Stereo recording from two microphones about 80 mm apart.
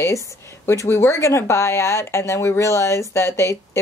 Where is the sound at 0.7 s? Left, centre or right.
Left.